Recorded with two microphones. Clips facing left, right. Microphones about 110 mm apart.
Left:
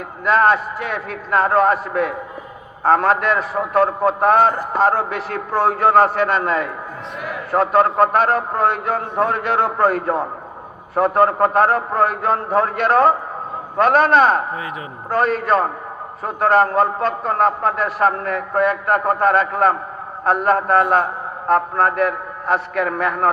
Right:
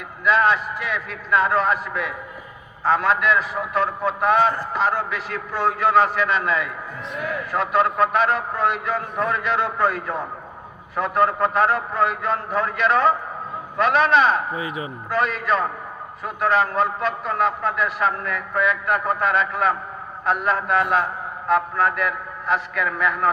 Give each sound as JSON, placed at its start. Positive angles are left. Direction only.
{"t": 0.3, "sound": "a man's voice", "side_deg": 50}
{"t": 14.5, "sound": "speech", "side_deg": -5}
{"t": 15.1, "sound": "a man's voice", "side_deg": 50}
{"t": 16.5, "sound": "a man's voice", "side_deg": 50}